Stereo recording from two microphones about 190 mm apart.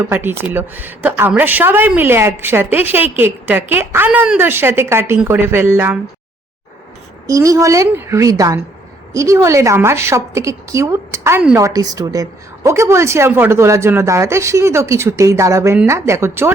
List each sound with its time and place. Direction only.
0.0 s a woman's voice: 10° right (ahead or behind)
7.3 s a woman's voice: 15° right (ahead or behind)